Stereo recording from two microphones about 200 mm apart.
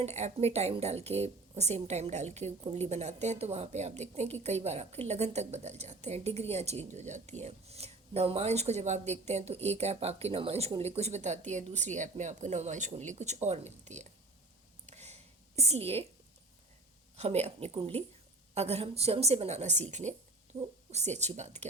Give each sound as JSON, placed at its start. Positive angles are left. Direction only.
{"t": 0.0, "sound": "a woman's voice", "side_deg": -35}
{"t": 14.8, "sound": "a sound", "side_deg": -35}
{"t": 17.2, "sound": "a woman's voice", "side_deg": -35}